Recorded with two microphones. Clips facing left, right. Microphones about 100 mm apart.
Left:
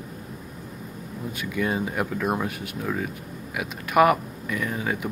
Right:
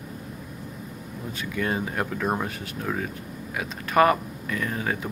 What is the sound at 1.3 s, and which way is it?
Speech, 5° left (ahead or behind).